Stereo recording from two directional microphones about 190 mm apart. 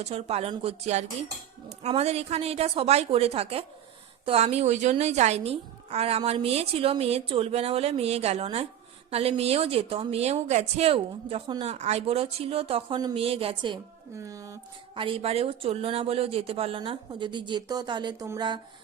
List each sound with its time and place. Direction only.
0.0 s a woman's voice: 35° right (ahead or behind)
14.2 s speech: 15° right (ahead or behind)